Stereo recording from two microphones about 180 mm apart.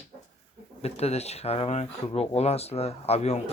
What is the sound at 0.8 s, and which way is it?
Speech, 35° left (ahead or behind).